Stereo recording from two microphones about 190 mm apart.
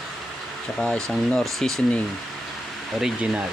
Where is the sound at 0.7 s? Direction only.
5° left (ahead or behind).